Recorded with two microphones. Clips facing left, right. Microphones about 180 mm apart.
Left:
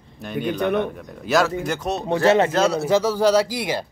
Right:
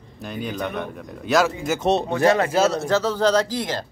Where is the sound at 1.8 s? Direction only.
25° right (ahead or behind).